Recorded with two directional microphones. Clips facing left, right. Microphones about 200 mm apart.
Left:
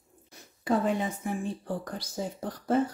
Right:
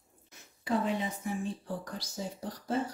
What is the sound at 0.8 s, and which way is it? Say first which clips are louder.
A woman's voice: left 4 dB; 50° left (ahead or behind).